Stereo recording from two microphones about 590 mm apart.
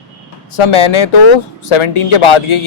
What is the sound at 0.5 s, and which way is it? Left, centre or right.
Speech, left.